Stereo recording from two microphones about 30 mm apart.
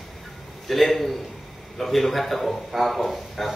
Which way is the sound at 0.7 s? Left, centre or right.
Centre.